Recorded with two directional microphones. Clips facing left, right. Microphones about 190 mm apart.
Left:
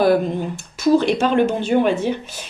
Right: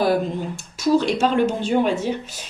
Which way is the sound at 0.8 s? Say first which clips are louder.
Left 2 dB; 55° left (ahead or behind).